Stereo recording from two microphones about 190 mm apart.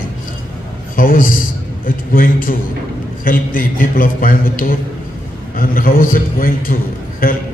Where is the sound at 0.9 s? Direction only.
45° left (ahead or behind).